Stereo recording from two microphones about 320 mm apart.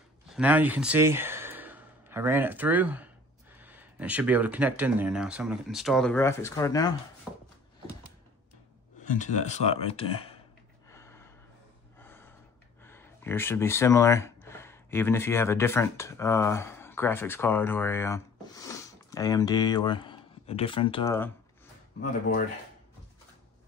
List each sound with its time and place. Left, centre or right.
0.3 s speech: centre
9.1 s speech: left
10.9 s gasp: centre
12.8 s speech: centre